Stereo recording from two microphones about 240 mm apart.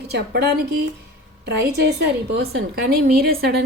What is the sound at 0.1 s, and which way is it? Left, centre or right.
A woman's voice, right.